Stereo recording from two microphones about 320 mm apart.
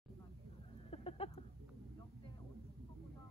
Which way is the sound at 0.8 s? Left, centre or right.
Centre.